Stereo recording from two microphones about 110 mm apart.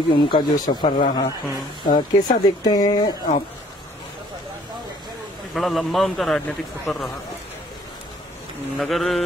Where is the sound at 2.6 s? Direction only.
35° left (ahead or behind).